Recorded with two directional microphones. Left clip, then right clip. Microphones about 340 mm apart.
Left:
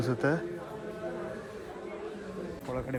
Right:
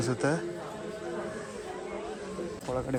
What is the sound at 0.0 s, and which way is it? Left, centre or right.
Speech, centre.